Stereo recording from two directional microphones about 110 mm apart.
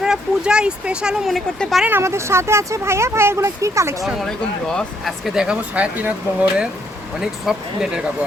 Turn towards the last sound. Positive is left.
turn(degrees=-5)  # may be behind; listen again after turning